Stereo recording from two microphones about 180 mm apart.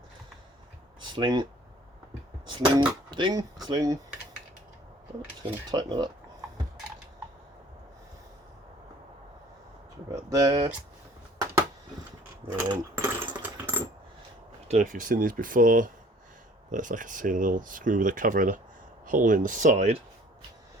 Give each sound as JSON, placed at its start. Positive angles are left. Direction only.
{"t": 1.0, "sound": "speech", "side_deg": -25}
{"t": 2.5, "sound": "speech", "side_deg": -25}
{"t": 5.7, "sound": "speech", "side_deg": -25}
{"t": 10.3, "sound": "speech", "side_deg": -20}
{"t": 12.5, "sound": "mechanisms", "side_deg": -15}
{"t": 13.4, "sound": "a sound", "side_deg": -10}
{"t": 14.7, "sound": "speech", "side_deg": -45}